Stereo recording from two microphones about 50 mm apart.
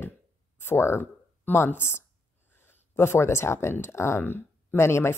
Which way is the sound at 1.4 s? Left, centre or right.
Left.